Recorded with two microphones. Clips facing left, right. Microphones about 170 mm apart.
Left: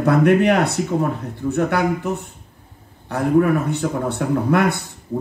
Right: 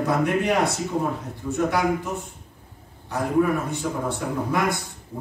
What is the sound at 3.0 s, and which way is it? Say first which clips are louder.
A man's voice: left 5 dB; 65° left (ahead or behind).